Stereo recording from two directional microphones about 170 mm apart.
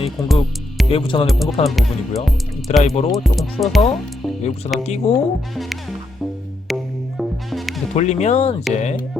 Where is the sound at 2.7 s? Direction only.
40° left (ahead or behind).